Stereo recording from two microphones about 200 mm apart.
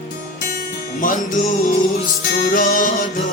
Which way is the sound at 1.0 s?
40° left (ahead or behind).